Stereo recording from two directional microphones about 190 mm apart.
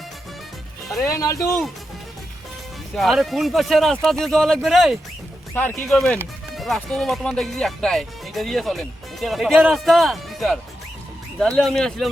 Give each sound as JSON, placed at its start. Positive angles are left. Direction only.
{"t": 1.0, "sound": "speech", "side_deg": 15}
{"t": 2.9, "sound": "speech", "side_deg": 0}
{"t": 5.5, "sound": "speech", "side_deg": 10}